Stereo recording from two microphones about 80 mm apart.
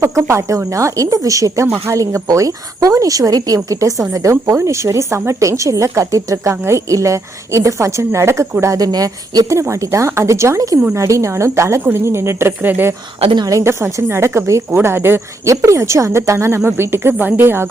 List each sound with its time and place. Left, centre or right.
0.0 s speech: right
8.6 s speech: right
13.5 s speech: right